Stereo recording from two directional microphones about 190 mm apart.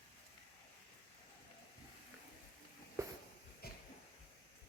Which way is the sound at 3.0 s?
15° right (ahead or behind).